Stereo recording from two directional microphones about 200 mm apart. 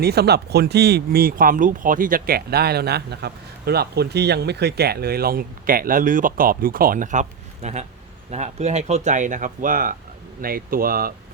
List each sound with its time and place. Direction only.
0.0 s speech: 55° right (ahead or behind)